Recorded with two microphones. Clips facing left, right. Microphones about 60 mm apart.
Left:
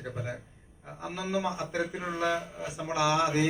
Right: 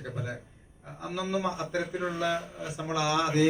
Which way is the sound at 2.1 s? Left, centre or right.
Left.